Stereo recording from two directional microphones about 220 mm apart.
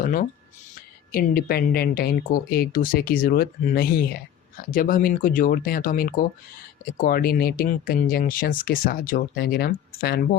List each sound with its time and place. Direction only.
0.0 s speech: 35° left (ahead or behind)
1.4 s speech: 45° left (ahead or behind)